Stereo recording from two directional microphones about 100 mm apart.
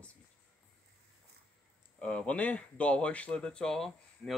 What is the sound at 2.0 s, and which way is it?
Speech, 10° left (ahead or behind).